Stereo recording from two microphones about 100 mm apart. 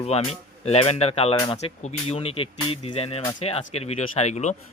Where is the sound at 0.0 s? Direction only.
80° left.